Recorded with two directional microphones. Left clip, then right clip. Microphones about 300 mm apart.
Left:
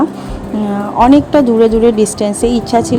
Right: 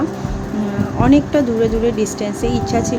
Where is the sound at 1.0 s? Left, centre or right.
Left.